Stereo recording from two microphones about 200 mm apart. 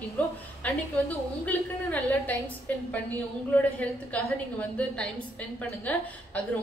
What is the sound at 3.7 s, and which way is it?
A woman's voice, 5° left (ahead or behind).